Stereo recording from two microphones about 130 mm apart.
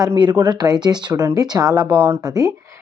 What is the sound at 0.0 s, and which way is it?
Speech, 35° right (ahead or behind).